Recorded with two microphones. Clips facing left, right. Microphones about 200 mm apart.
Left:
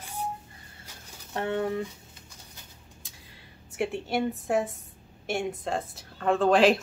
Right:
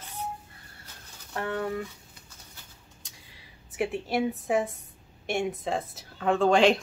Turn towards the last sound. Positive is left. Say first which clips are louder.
# even
turn(degrees=0)  # may be behind; listen again after turning